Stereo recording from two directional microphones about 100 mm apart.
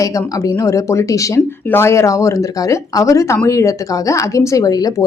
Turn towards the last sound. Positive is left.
turn(degrees=40)  # may be behind; listen again after turning